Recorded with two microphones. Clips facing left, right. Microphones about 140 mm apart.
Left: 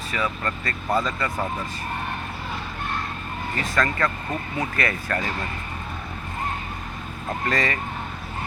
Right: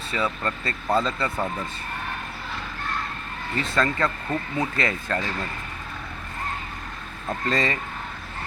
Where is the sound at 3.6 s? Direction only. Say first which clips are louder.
Even; 25° right (ahead or behind).